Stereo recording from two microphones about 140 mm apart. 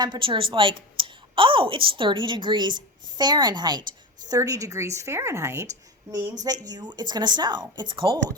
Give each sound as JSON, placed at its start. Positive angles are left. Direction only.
{"t": 0.0, "sound": "a woman's voice", "side_deg": -35}